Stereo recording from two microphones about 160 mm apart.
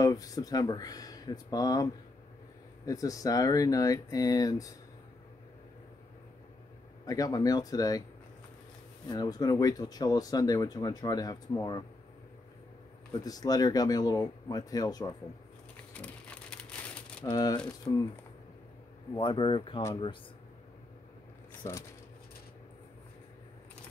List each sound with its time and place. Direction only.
0.0 s speech: 20° left (ahead or behind)
7.1 s speech: 20° left (ahead or behind)
9.1 s speech: 25° left (ahead or behind)
13.2 s speech: 25° left (ahead or behind)
15.9 s a sound: 10° left (ahead or behind)
17.3 s speech: 25° left (ahead or behind)
19.1 s speech: 30° left (ahead or behind)
21.6 s speech: 20° left (ahead or behind)